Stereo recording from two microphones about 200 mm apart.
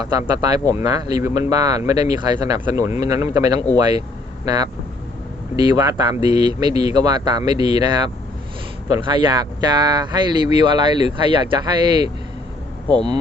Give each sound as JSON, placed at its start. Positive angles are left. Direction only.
{"t": 0.1, "sound": "speech", "side_deg": -20}
{"t": 5.7, "sound": "speech", "side_deg": -20}